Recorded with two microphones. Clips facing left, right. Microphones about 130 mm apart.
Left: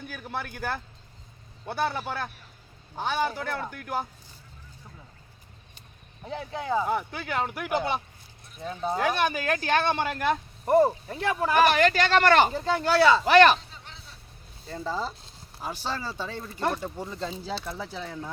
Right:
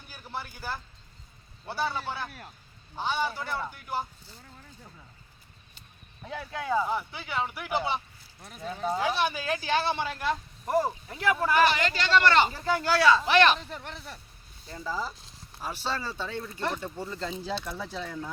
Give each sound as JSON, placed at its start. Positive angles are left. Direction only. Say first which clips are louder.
{"t": 0.1, "sound": "speech", "louder": "left 1 dB", "side_deg": 60}
{"t": 6.2, "sound": "speech", "louder": "left 1 dB", "side_deg": 25}
{"t": 6.8, "sound": "speech", "louder": "left 3 dB", "side_deg": 55}
{"t": 12.5, "sound": "speech", "louder": "left 3 dB", "side_deg": 25}
{"t": 13.2, "sound": "speech", "louder": "left 5 dB", "side_deg": 45}
{"t": 13.7, "sound": "speech", "louder": "right 8 dB", "side_deg": -65}
{"t": 14.7, "sound": "speech", "louder": "left 3 dB", "side_deg": 25}
{"t": 15.6, "sound": "speech", "louder": "even", "side_deg": 15}